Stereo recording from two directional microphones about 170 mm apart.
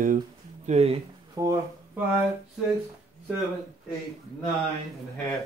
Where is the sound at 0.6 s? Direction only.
35° right (ahead or behind).